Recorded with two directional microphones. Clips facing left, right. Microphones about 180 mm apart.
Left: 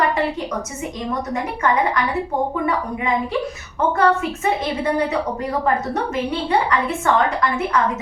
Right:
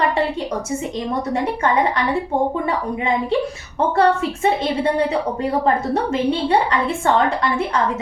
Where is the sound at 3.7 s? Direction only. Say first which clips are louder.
Right 1 dB; 30° right (ahead or behind).